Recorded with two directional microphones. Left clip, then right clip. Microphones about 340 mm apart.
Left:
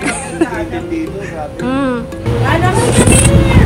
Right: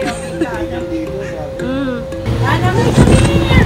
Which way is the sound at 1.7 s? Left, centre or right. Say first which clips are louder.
Left 5 dB; centre.